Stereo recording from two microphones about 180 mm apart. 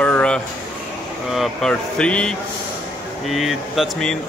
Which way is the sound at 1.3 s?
Centre (ahead or behind).